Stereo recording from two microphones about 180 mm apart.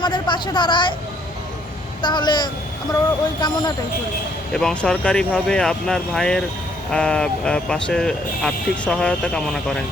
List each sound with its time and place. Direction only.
0.0 s speech: 25° left (ahead or behind)
2.0 s a woman's voice: 25° left (ahead or behind)
4.5 s speech: 5° left (ahead or behind)